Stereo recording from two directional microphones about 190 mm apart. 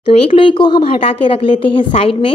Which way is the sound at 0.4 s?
25° left (ahead or behind).